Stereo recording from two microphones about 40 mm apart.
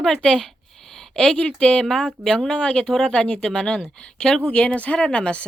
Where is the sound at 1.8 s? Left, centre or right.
Centre.